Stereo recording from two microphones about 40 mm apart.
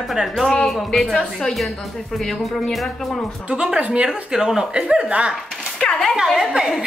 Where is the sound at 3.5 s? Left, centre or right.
Right.